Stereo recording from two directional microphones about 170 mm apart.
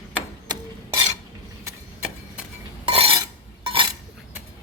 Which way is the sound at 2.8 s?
30° right (ahead or behind).